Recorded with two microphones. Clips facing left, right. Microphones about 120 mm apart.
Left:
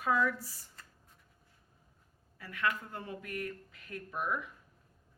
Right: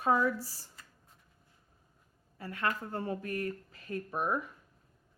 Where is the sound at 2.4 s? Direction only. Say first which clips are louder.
Right 1 dB; 30° right (ahead or behind).